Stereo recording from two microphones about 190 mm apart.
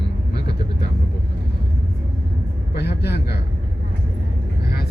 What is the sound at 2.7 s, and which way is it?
Speech, 60° left (ahead or behind).